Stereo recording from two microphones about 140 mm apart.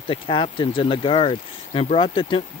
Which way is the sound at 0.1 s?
40° left (ahead or behind).